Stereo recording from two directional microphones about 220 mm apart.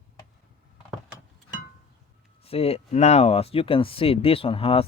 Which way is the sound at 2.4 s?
25° left (ahead or behind).